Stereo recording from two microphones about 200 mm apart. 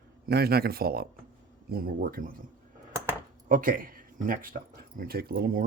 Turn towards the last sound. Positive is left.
turn(degrees=-45)  # may be behind; listen again after turning